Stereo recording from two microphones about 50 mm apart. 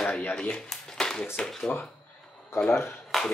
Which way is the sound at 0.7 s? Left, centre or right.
Centre.